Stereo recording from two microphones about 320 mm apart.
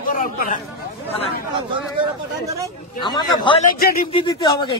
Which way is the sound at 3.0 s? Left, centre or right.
Centre.